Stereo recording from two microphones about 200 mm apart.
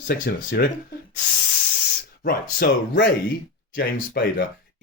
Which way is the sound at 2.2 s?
45° left (ahead or behind).